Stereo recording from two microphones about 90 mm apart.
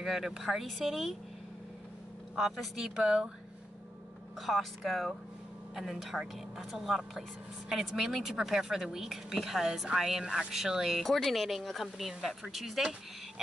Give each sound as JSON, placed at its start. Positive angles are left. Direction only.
{"t": 0.0, "sound": "a woman's voice", "side_deg": 0}
{"t": 2.3, "sound": "a woman's voice", "side_deg": 0}
{"t": 4.4, "sound": "a woman's voice", "side_deg": 0}